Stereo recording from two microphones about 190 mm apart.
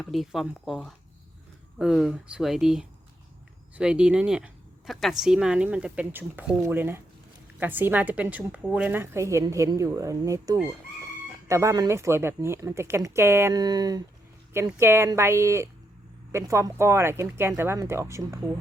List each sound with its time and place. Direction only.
0.0 s speech: centre (ahead or behind)